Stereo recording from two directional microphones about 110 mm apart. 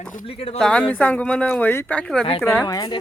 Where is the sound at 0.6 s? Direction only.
10° left (ahead or behind).